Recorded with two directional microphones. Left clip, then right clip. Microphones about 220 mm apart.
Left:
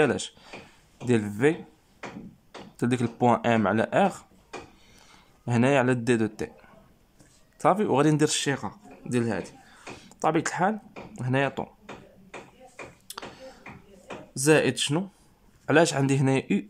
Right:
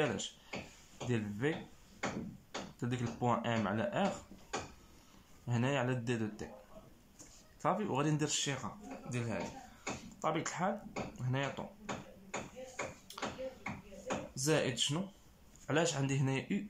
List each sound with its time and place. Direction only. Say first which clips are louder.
0.0 s speech: left 12 dB; 45° left (ahead or behind)
2.8 s speech: left 14 dB; 45° left (ahead or behind)
5.5 s speech: left 13 dB; 45° left (ahead or behind)
7.6 s speech: left 13 dB; 45° left (ahead or behind)
14.3 s speech: left 13 dB; 50° left (ahead or behind)